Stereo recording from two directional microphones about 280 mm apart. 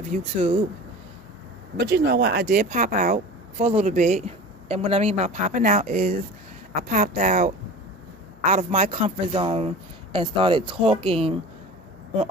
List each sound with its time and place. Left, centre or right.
0.1 s speech: centre
1.8 s speech: right; by 11.3 s centre